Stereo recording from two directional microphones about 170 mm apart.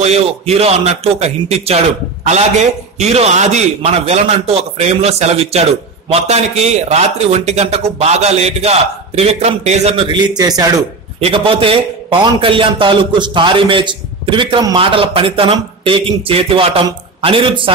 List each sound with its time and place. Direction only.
0.0 s a man's voice: 40° right (ahead or behind)
10.0 s a man's voice: 25° right (ahead or behind)
11.1 s a man's voice: 35° right (ahead or behind)